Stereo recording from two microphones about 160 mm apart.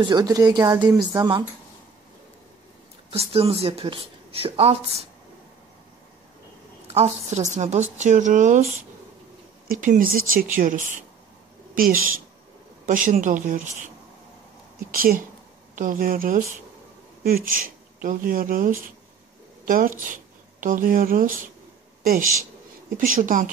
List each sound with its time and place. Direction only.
0.0 s speech: 25° right (ahead or behind)
3.1 s speech: 35° right (ahead or behind)
6.9 s a woman's voice: 45° right (ahead or behind)
9.7 s speech: 55° right (ahead or behind)
14.9 s speech: 60° right (ahead or behind)
22.9 s speech: 60° right (ahead or behind)